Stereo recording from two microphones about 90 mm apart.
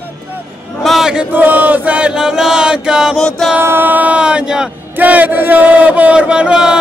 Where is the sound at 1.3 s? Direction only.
20° right (ahead or behind).